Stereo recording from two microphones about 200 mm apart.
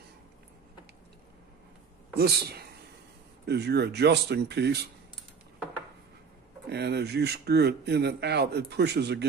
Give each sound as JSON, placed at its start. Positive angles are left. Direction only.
{"t": 2.1, "sound": "speech", "side_deg": -50}
{"t": 6.7, "sound": "speech", "side_deg": -55}